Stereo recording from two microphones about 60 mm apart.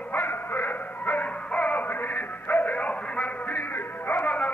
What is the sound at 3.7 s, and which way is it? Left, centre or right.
Music, left.